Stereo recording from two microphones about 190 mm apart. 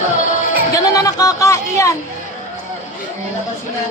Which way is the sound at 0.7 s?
20° left (ahead or behind).